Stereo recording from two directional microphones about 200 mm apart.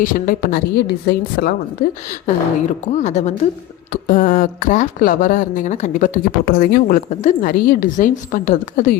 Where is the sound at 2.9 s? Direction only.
35° left (ahead or behind).